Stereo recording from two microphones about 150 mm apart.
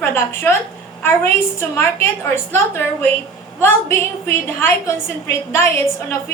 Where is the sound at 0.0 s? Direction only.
15° left (ahead or behind).